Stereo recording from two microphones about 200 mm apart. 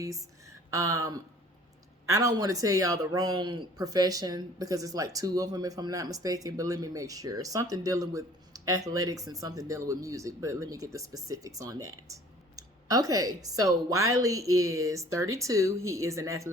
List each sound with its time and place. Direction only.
0.0 s a woman's voice: 15° right (ahead or behind)